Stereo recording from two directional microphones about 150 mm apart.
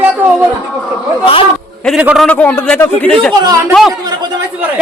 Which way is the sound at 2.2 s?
10° left (ahead or behind).